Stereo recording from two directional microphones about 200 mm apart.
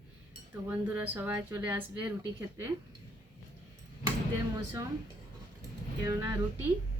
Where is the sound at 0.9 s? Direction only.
10° right (ahead or behind).